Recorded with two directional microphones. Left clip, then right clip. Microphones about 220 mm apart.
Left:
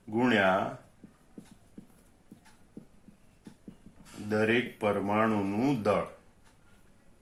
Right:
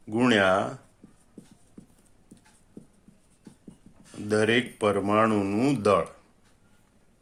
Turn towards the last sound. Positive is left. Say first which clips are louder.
# right 5 dB
turn(degrees=-50)  # may be behind; listen again after turning